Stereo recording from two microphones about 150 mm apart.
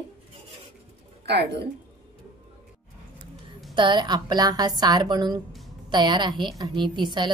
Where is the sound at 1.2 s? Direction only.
90° right.